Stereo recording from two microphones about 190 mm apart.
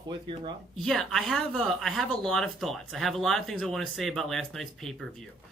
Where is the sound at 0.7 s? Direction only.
Centre (ahead or behind).